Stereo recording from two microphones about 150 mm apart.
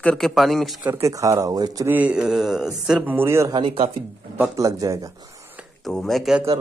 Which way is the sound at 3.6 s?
40° right (ahead or behind).